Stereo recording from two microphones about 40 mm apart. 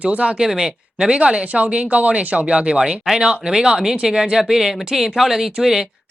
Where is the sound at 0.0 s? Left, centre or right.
Right.